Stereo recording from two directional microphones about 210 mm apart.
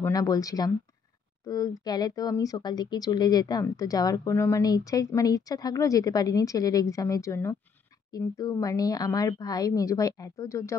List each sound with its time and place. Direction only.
0.0 s speech: 15° left (ahead or behind)